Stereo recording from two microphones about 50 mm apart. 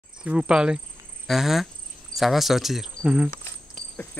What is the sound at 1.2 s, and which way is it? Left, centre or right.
Speech, centre.